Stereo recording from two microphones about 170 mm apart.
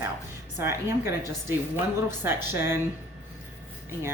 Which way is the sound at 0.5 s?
15° right (ahead or behind).